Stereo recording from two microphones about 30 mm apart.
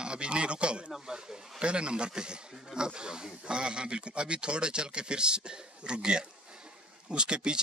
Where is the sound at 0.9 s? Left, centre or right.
Right.